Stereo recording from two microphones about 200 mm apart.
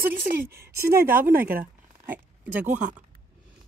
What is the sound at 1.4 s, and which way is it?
Speech, 45° right (ahead or behind).